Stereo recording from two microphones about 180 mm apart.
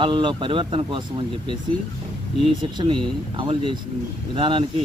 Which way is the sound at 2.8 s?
25° right (ahead or behind).